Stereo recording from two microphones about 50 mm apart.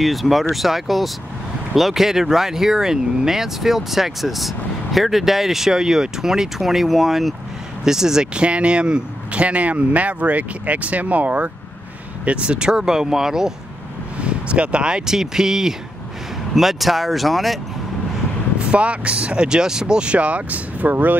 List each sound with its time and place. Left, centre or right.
0.0 s speech: centre
14.2 s speech: right; by 17.6 s centre
18.7 s speech: right